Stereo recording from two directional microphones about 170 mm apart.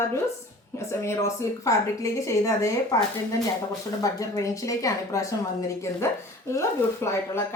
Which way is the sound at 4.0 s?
20° left (ahead or behind).